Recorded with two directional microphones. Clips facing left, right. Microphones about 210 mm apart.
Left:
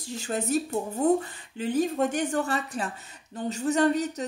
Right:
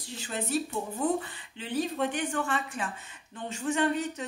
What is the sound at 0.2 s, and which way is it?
A woman's voice, 45° left (ahead or behind).